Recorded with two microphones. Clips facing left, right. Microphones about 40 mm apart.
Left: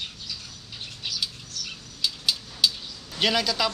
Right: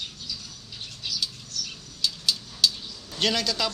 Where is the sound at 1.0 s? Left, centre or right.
Centre.